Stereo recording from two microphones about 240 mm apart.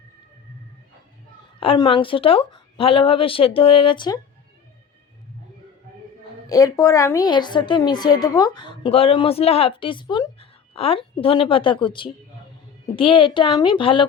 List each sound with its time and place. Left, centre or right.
1.5 s speech: left
6.5 s a woman's voice: centre